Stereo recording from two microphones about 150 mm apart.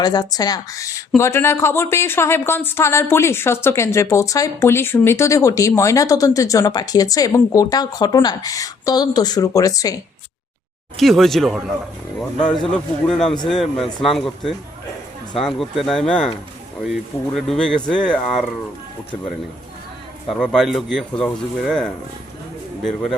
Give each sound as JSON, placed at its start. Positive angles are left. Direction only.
{"t": 0.0, "sound": "speech", "side_deg": 25}
{"t": 10.9, "sound": "speech", "side_deg": 0}
{"t": 12.7, "sound": "speech", "side_deg": 5}
{"t": 20.2, "sound": "speech", "side_deg": 5}